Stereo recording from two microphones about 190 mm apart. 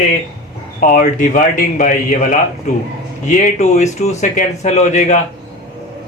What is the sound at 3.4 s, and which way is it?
Speech, 40° left (ahead or behind).